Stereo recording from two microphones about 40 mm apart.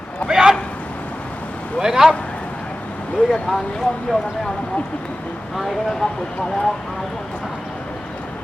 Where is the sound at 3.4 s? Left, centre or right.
Centre.